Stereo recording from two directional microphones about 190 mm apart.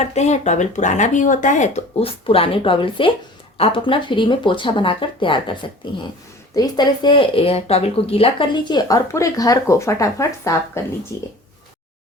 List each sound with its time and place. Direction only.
0.0 s speech: 35° left (ahead or behind); by 10.6 s 15° left (ahead or behind)